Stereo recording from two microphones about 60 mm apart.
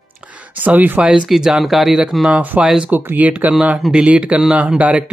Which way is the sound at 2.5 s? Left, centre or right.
Right.